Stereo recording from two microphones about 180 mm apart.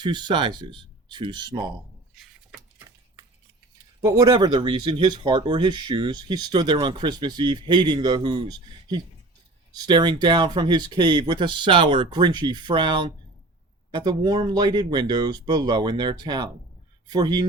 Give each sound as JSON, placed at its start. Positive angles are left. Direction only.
{"t": 0.0, "sound": "speech", "side_deg": -25}
{"t": 4.0, "sound": "speech", "side_deg": -20}